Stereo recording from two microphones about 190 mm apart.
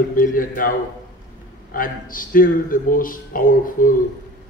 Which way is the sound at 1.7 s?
45° left (ahead or behind).